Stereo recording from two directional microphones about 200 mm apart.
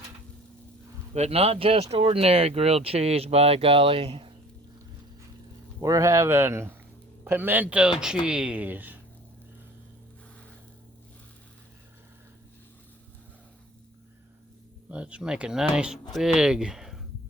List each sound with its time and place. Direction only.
1.1 s speech: 30° right (ahead or behind)
5.8 s speech: 15° right (ahead or behind)
14.8 s speech: 5° right (ahead or behind)